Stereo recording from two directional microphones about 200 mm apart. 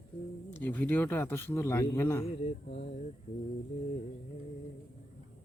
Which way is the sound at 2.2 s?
30° left (ahead or behind).